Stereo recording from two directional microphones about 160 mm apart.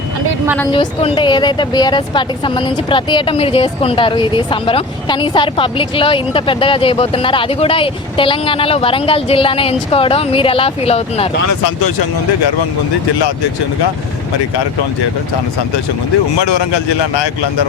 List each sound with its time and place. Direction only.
0.7 s speech: 30° left (ahead or behind)